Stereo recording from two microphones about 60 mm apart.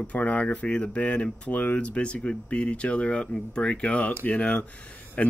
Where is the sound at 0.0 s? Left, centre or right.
Left.